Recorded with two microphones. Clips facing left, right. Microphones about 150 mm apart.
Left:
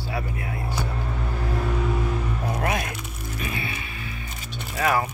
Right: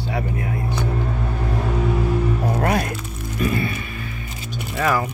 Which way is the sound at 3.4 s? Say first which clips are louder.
Right 10 dB; 45° right (ahead or behind).